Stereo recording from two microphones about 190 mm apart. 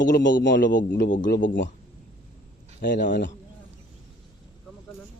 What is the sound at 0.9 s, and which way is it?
Speech, 65° left (ahead or behind).